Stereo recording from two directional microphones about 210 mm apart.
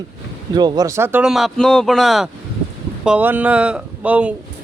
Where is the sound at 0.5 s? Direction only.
20° right (ahead or behind).